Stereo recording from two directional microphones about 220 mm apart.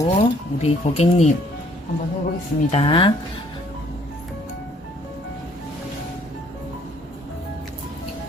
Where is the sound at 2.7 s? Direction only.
25° left (ahead or behind).